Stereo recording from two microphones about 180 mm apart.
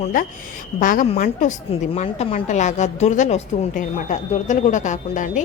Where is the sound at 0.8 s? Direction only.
45° left (ahead or behind).